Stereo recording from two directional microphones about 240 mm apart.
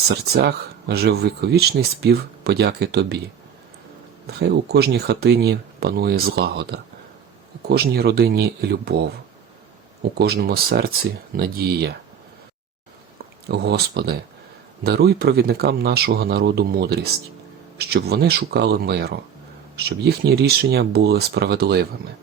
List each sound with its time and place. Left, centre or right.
0.3 s speech: right
4.4 s speech: right
10.0 s speech: right
13.5 s speech: right